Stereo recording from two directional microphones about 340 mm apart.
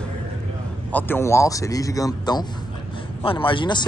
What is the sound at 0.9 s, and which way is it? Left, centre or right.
Speech, centre.